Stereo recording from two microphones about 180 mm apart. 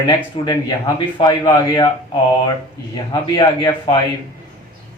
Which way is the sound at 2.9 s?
25° left (ahead or behind).